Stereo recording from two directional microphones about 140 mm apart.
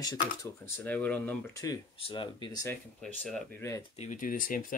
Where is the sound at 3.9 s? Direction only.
70° left (ahead or behind).